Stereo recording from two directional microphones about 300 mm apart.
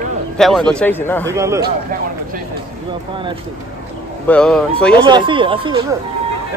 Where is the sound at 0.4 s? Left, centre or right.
Centre.